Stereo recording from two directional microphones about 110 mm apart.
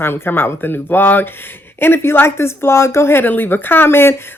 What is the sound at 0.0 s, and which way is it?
Speech, 20° left (ahead or behind).